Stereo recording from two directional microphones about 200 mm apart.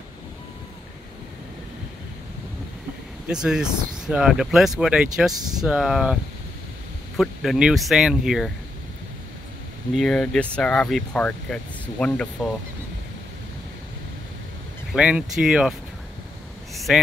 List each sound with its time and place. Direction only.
3.3 s speech: 5° right (ahead or behind)
5.3 s speech: 20° right (ahead or behind)
5.6 s speech: centre (ahead or behind)
7.2 s speech: centre (ahead or behind)
9.9 s speech: centre (ahead or behind)
15.0 s speech: 5° right (ahead or behind)
16.7 s a sound: centre (ahead or behind)